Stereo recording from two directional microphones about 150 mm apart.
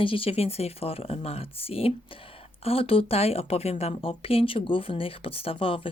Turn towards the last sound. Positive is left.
turn(degrees=35)  # may be behind; listen again after turning